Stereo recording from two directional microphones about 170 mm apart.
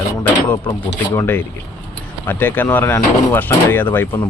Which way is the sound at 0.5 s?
15° left (ahead or behind).